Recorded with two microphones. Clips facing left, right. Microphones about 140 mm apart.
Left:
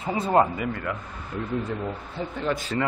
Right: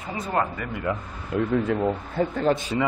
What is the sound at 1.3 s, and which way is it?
Speech, 70° right (ahead or behind).